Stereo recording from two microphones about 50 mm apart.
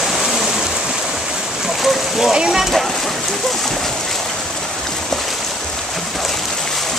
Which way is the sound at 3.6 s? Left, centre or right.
Centre.